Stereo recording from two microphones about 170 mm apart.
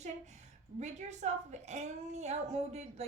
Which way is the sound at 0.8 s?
40° right (ahead or behind).